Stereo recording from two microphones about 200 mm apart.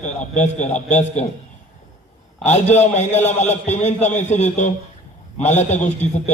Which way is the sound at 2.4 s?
35° left (ahead or behind).